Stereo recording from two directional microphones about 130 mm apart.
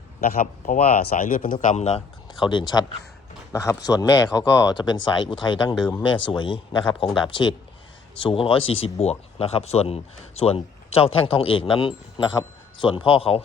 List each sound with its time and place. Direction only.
0.2 s speech: 85° left; by 2.0 s 55° left (ahead or behind)
2.4 s a man's voice: 35° left (ahead or behind)